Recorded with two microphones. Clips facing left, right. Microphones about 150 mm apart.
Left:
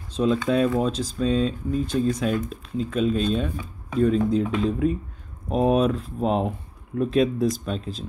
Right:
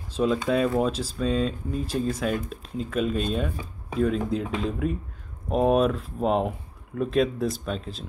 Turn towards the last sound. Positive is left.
turn(degrees=0)  # may be behind; listen again after turning